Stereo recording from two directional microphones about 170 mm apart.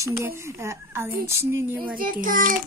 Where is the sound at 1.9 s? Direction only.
55° right (ahead or behind).